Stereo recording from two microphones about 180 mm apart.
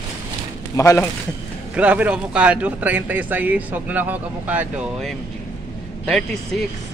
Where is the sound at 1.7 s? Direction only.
10° right (ahead or behind).